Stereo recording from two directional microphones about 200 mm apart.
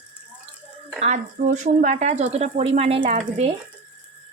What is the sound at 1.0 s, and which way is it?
A woman's voice, 35° right (ahead or behind).